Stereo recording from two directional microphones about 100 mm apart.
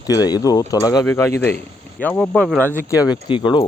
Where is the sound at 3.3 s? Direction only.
55° left (ahead or behind).